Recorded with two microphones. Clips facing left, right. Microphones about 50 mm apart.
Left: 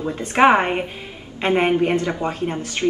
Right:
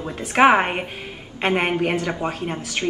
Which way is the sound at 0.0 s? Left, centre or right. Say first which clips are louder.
Left 1 dB; centre.